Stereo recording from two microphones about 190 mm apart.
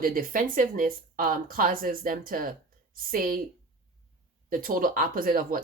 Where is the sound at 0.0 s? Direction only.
50° right (ahead or behind).